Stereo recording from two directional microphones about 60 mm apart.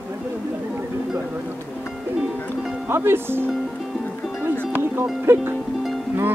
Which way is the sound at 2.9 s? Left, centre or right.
Right.